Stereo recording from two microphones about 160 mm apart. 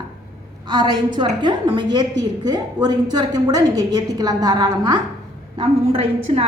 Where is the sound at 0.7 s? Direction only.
30° right (ahead or behind).